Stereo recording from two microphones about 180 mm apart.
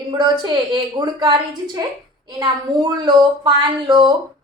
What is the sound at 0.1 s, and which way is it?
A woman's voice, 25° right (ahead or behind).